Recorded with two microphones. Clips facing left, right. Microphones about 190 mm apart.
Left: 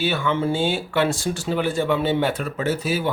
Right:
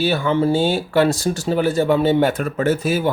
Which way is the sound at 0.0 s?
40° right (ahead or behind).